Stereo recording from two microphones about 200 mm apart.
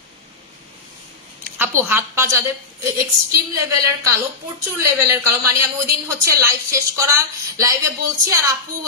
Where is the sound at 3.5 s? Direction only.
15° right (ahead or behind).